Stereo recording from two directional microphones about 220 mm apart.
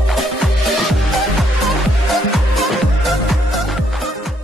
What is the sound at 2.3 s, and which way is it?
Music, centre (ahead or behind).